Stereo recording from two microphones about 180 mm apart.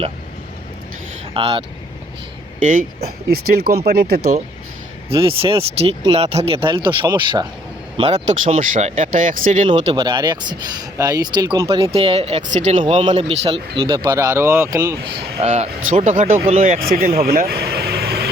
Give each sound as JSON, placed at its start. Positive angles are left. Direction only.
{"t": 1.3, "sound": "speech", "side_deg": -30}
{"t": 2.6, "sound": "speech", "side_deg": -45}
{"t": 3.2, "sound": "speech", "side_deg": -60}
{"t": 5.0, "sound": "speech", "side_deg": -30}
{"t": 9.9, "sound": "speech", "side_deg": -25}
{"t": 11.7, "sound": "speech", "side_deg": -30}
{"t": 12.8, "sound": "speech", "side_deg": -25}
{"t": 15.1, "sound": "speech", "side_deg": -35}
{"t": 16.6, "sound": "speech", "side_deg": -55}